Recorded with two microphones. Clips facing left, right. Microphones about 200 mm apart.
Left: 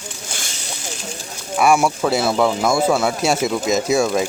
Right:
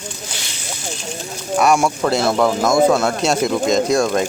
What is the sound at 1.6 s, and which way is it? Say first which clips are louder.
Speech: even; 5° left (ahead or behind).